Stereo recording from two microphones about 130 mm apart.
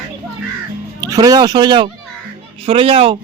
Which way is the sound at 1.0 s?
25° right (ahead or behind).